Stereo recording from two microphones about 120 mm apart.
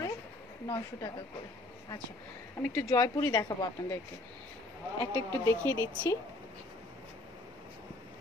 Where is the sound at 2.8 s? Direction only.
30° left (ahead or behind).